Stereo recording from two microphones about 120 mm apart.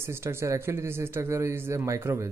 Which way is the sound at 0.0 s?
20° right (ahead or behind).